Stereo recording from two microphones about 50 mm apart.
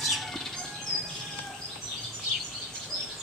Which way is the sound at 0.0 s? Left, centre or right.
Centre.